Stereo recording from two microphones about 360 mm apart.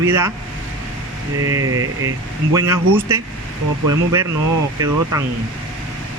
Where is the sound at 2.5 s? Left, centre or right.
Centre.